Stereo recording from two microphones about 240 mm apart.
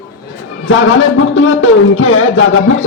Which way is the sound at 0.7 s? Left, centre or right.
Left.